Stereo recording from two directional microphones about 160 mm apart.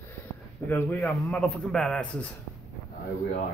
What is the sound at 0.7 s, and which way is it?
Speech, 10° left (ahead or behind).